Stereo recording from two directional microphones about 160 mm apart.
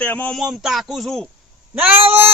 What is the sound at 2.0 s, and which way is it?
Speech, 35° right (ahead or behind).